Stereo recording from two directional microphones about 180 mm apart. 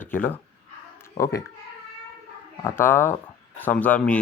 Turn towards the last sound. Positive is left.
turn(degrees=10)  # may be behind; listen again after turning